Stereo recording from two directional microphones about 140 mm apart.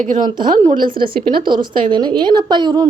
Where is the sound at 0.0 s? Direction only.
70° right (ahead or behind).